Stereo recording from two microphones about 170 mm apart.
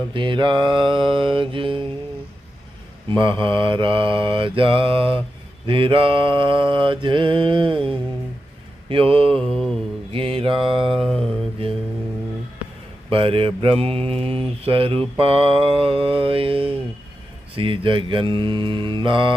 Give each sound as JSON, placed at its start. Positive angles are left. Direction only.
{"t": 0.1, "sound": "mantra", "side_deg": -30}
{"t": 3.1, "sound": "mantra", "side_deg": -30}
{"t": 10.9, "sound": "a sound", "side_deg": 0}
{"t": 13.1, "sound": "mantra", "side_deg": -30}